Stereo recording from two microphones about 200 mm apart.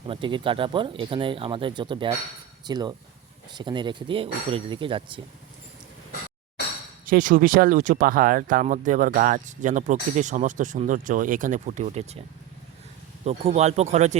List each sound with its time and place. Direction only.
0.1 s speech: 25° right (ahead or behind)
7.0 s speech: 45° right (ahead or behind)
13.2 s speech: 30° right (ahead or behind)